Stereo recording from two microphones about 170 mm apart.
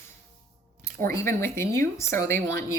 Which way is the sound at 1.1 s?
15° left (ahead or behind).